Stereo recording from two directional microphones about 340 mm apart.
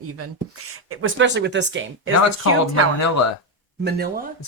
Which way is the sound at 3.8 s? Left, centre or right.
Right.